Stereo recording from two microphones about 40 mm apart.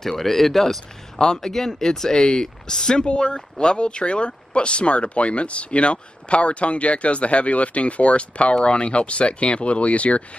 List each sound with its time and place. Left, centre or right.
0.0 s speech: centre
1.2 s speech: centre; by 10.2 s left